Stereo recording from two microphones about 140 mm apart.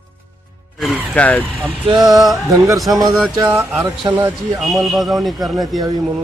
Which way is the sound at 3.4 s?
15° right (ahead or behind).